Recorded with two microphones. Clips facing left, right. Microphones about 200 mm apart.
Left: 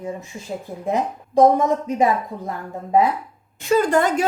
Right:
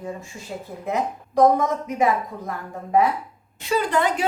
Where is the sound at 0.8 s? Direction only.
25° left (ahead or behind).